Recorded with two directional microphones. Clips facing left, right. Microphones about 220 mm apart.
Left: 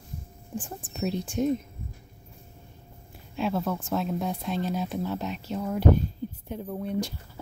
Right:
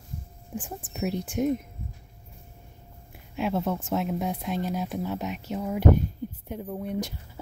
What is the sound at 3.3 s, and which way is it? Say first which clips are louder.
Speech: right 1 dB; 20° right (ahead or behind).